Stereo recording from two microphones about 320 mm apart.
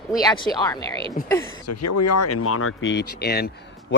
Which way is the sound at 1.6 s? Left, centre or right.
Left.